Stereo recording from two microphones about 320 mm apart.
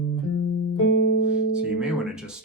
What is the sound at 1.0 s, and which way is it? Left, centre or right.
Music, left.